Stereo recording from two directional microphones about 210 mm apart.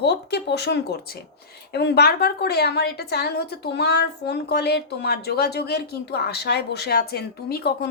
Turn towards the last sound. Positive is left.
turn(degrees=50)  # may be behind; listen again after turning